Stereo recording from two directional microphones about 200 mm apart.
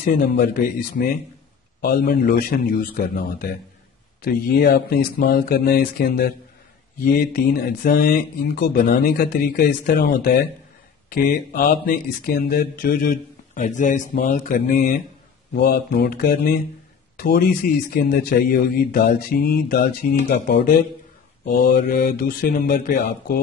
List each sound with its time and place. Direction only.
0.4 s speech: 45° left (ahead or behind)